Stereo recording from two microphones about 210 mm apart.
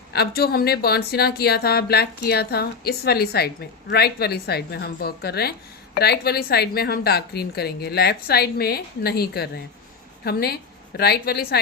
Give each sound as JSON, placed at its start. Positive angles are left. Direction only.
{"t": 0.1, "sound": "a woman's voice", "side_deg": 50}